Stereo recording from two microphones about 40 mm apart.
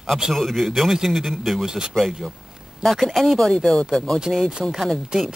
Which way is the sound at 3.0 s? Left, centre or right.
Centre.